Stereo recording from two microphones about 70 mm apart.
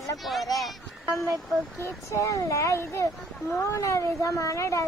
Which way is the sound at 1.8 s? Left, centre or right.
Left.